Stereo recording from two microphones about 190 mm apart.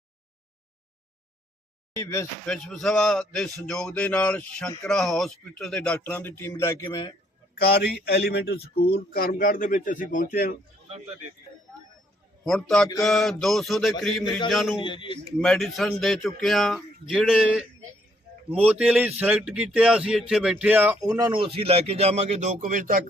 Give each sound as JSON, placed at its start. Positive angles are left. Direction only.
{"t": 2.0, "sound": "speech", "side_deg": 15}
{"t": 2.5, "sound": "speech", "side_deg": 0}
{"t": 7.6, "sound": "speech", "side_deg": 60}
{"t": 12.5, "sound": "speech", "side_deg": 5}
{"t": 14.8, "sound": "a man's voice", "side_deg": 25}
{"t": 15.4, "sound": "speech", "side_deg": 0}